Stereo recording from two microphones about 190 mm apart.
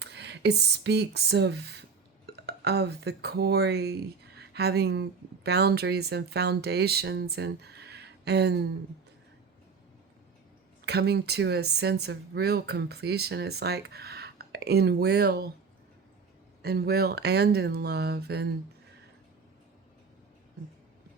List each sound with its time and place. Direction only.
0.0 s a woman's voice: 60° right (ahead or behind)
10.8 s speech: 60° right (ahead or behind)
16.6 s speech: 55° right (ahead or behind)